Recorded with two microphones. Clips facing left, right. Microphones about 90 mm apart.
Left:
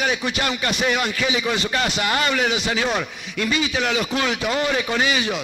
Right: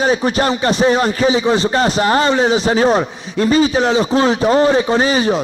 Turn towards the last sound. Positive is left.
turn(degrees=-35)  # may be behind; listen again after turning